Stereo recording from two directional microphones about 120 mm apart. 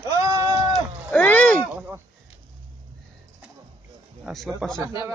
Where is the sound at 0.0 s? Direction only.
30° right (ahead or behind).